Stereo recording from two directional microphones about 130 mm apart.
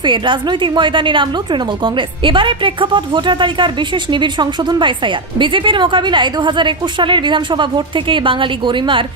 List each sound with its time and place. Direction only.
0.0 s a woman's voice: 40° right (ahead or behind)